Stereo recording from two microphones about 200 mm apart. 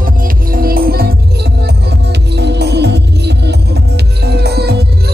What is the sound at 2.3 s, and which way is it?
Music, 55° right (ahead or behind).